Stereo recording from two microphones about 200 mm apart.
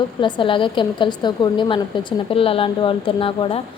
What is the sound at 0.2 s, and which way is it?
A woman's voice, 25° left (ahead or behind).